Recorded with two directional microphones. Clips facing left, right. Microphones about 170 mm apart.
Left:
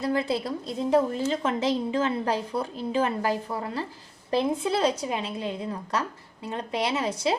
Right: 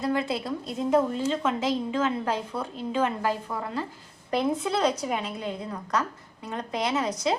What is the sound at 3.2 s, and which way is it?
A woman's voice, 35° left (ahead or behind).